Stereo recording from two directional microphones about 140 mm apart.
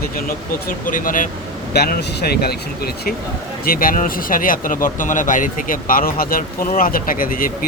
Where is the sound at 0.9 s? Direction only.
75° left (ahead or behind).